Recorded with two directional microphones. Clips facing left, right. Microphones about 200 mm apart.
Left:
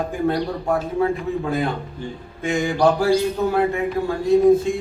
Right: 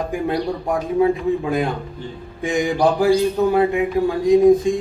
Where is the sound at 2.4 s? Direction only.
15° right (ahead or behind).